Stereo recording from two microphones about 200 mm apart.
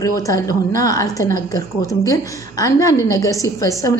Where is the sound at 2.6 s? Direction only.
15° left (ahead or behind).